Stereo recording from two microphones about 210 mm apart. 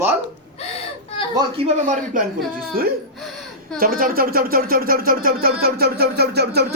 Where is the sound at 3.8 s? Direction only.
45° right (ahead or behind).